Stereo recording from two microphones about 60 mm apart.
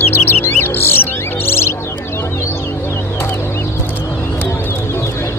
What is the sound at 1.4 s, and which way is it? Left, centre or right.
Bird, left.